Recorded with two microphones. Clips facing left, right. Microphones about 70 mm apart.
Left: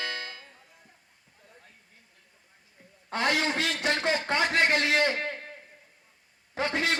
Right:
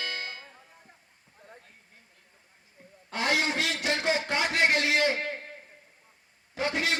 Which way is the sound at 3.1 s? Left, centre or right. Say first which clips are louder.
Left 1 dB; left.